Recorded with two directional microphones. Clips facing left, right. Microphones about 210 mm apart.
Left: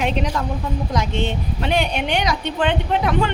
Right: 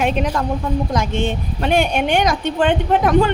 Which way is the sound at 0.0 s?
50° right (ahead or behind).